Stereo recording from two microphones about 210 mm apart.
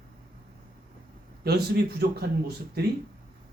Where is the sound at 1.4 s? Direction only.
50° right (ahead or behind).